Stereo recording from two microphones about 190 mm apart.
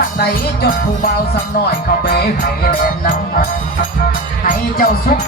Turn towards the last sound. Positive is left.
turn(degrees=45)  # may be behind; listen again after turning